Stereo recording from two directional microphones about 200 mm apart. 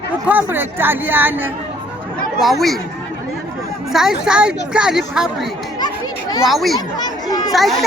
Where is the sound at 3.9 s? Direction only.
Centre (ahead or behind).